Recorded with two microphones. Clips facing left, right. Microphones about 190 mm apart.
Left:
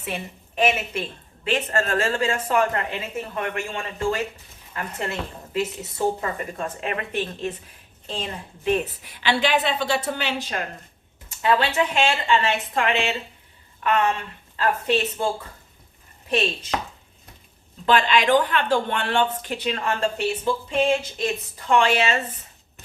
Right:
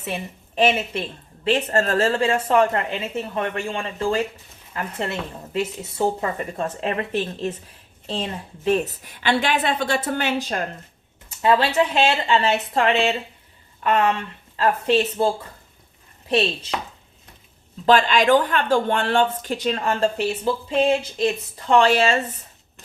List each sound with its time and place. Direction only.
0.0 s a woman's voice: 30° right (ahead or behind); by 10.7 s 45° right (ahead or behind)
11.3 s a woman's voice: 30° right (ahead or behind)
14.5 s a woman's voice: 35° right (ahead or behind)
16.3 s a woman's voice: 35° right (ahead or behind)
17.8 s a woman's voice: 40° right (ahead or behind)